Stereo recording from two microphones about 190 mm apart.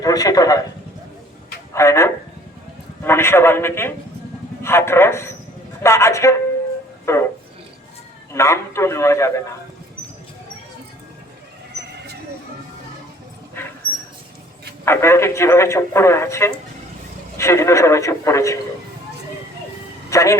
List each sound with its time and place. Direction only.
0.0 s a man's voice: 20° left (ahead or behind)
1.7 s speech: 15° left (ahead or behind)
7.0 s music: 15° left (ahead or behind)
8.3 s speech: 15° left (ahead or behind)
13.6 s dog: 10° left (ahead or behind)
14.8 s speech: 15° left (ahead or behind)
20.1 s speech: 15° left (ahead or behind)